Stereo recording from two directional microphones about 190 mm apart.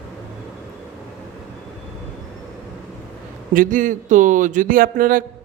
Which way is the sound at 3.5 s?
45° right (ahead or behind).